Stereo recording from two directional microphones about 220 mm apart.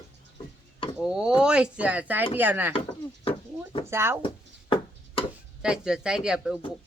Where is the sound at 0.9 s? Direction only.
5° right (ahead or behind).